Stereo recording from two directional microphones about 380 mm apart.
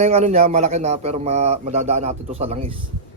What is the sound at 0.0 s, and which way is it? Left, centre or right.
A man's voice, centre.